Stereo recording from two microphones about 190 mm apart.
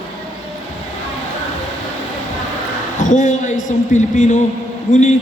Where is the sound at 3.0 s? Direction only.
40° left (ahead or behind).